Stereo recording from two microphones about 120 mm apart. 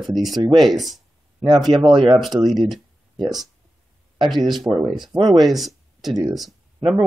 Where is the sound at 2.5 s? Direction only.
Centre (ahead or behind).